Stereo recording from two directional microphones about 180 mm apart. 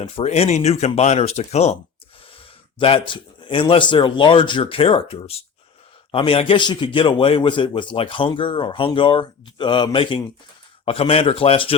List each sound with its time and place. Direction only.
0.0 s a man's voice: 35° left (ahead or behind)